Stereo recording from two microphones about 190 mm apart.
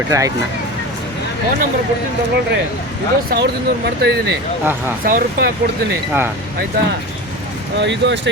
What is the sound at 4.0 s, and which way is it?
Speech, 60° right (ahead or behind).